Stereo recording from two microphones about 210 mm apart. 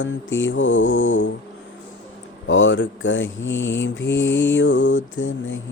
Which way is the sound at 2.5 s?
65° left (ahead or behind).